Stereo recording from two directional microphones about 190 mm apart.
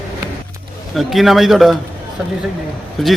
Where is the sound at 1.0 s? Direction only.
Centre (ahead or behind).